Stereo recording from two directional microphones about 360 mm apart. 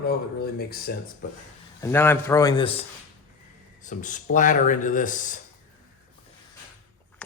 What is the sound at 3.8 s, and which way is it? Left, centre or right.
Speech, left.